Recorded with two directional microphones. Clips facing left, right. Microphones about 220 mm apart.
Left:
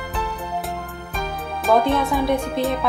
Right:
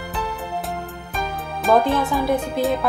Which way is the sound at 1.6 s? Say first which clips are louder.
Even; centre (ahead or behind).